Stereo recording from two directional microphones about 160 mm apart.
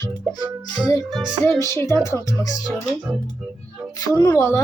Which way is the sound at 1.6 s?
20° left (ahead or behind).